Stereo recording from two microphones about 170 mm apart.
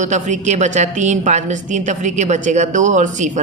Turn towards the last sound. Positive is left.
turn(degrees=-45)  # may be behind; listen again after turning